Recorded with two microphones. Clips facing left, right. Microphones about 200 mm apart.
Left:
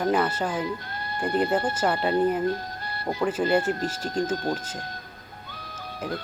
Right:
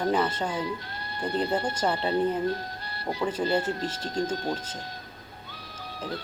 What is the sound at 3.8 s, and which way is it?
Speech, 10° left (ahead or behind).